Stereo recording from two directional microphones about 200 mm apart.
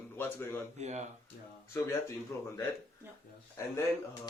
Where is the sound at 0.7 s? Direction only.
35° right (ahead or behind).